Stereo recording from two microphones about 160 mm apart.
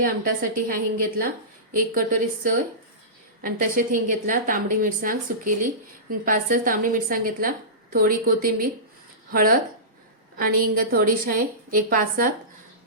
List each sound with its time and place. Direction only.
0.5 s a woman's voice: 60° right (ahead or behind)